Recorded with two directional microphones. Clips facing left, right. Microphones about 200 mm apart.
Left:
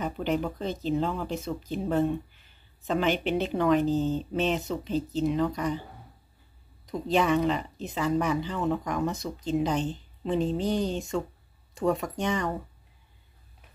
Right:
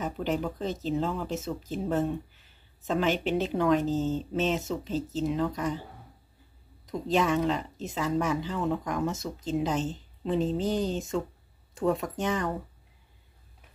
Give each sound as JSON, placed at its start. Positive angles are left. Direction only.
{"t": 0.0, "sound": "speech", "side_deg": 0}
{"t": 6.9, "sound": "speech", "side_deg": 0}